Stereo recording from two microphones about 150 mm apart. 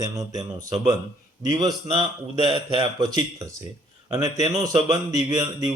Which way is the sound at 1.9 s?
35° right (ahead or behind).